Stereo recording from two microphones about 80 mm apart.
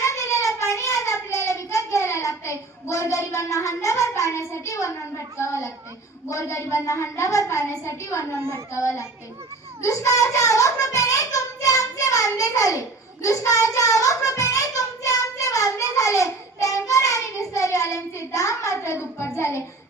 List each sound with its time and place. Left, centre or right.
0.0 s child singing: left
5.5 s a child's voice: left
8.4 s a child's voice: right
8.7 s a child's voice: left
9.8 s child singing: left
19.4 s a child's voice: left